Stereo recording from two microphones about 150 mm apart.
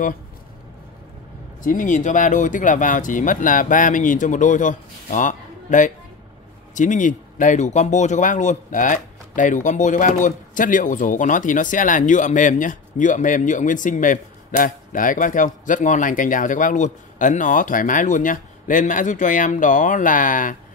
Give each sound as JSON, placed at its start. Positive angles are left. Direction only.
{"t": 1.6, "sound": "speech", "side_deg": 60}